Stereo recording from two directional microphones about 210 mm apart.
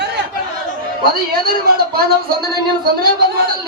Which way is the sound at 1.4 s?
45° right (ahead or behind).